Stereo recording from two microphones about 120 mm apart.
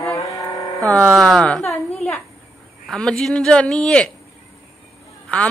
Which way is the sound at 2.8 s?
5° left (ahead or behind).